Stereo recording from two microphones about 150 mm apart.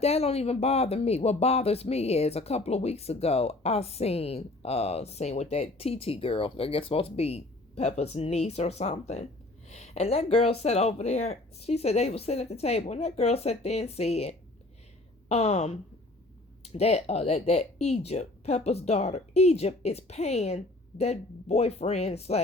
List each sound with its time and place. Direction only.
0.0 s speech: 45° left (ahead or behind)